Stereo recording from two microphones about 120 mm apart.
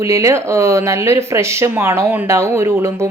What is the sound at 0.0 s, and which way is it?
Speech, 25° right (ahead or behind).